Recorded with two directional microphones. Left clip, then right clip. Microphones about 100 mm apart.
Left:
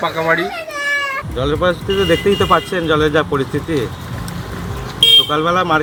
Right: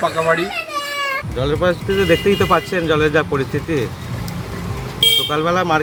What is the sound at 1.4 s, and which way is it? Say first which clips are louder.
Speech: left 2 dB; centre (ahead or behind).